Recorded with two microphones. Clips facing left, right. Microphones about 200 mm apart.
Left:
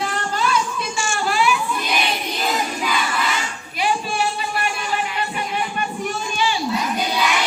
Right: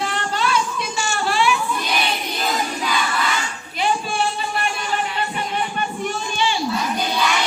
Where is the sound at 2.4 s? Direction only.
5° left (ahead or behind).